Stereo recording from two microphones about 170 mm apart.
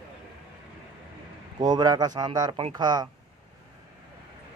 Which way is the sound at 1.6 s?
25° right (ahead or behind).